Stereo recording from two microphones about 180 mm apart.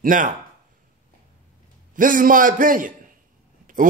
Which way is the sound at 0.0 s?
45° right (ahead or behind).